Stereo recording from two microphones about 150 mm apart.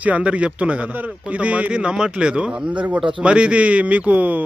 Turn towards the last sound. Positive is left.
turn(degrees=-10)  # may be behind; listen again after turning